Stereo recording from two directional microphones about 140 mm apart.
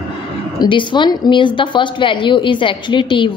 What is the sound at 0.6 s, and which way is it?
A woman's voice, 35° left (ahead or behind).